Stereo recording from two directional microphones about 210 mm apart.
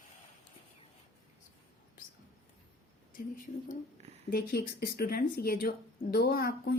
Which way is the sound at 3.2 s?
40° left (ahead or behind).